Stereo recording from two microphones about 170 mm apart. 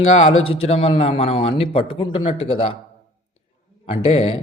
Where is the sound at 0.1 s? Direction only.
35° left (ahead or behind).